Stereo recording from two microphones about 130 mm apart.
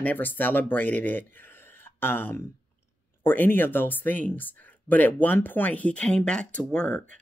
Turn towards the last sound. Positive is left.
turn(degrees=10)  # may be behind; listen again after turning